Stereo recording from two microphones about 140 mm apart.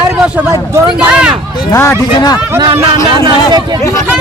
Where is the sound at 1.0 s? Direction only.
10° right (ahead or behind).